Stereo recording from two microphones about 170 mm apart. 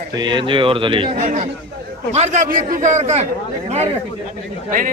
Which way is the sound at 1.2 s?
45° right (ahead or behind).